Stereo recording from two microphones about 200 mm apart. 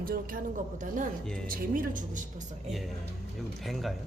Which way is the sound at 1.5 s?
45° right (ahead or behind).